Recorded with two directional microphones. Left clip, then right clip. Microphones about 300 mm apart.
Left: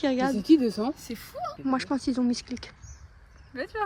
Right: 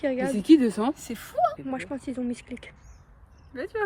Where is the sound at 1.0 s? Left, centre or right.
Centre.